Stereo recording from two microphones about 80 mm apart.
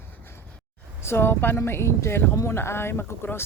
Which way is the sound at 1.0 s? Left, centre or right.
Left.